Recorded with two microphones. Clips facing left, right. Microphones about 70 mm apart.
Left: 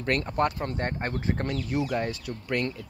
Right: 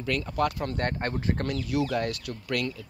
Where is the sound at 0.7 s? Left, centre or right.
Centre.